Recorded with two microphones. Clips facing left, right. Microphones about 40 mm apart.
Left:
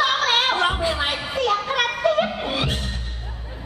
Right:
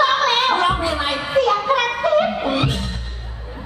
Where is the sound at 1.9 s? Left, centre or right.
Centre.